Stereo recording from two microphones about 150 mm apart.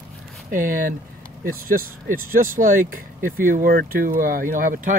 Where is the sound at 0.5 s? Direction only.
65° right (ahead or behind).